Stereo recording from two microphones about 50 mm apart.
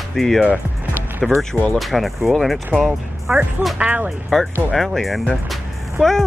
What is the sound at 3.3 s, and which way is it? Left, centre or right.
Speech, right.